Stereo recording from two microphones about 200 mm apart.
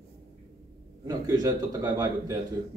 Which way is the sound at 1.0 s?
15° right (ahead or behind).